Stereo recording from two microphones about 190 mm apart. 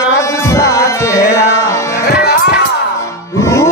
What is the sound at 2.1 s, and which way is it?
Music, 60° left (ahead or behind).